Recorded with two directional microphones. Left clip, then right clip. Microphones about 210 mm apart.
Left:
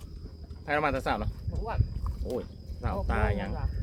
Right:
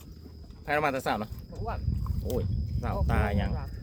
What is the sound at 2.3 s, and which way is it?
Speech, 45° right (ahead or behind).